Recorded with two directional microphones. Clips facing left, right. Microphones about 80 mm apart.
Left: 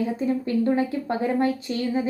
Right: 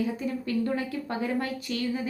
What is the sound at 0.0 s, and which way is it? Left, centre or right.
A woman's voice, left.